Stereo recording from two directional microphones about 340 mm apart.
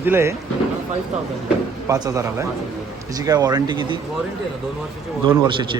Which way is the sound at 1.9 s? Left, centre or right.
Centre.